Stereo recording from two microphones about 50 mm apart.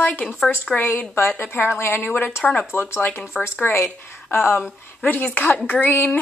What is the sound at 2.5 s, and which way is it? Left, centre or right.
Speech, left.